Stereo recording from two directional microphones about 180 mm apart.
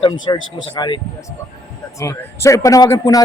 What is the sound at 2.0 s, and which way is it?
Speech, 15° left (ahead or behind).